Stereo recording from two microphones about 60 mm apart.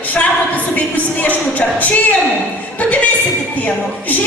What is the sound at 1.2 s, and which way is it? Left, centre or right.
Music, left.